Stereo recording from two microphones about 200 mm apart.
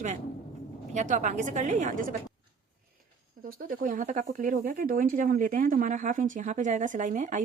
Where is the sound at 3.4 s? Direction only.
45° right (ahead or behind).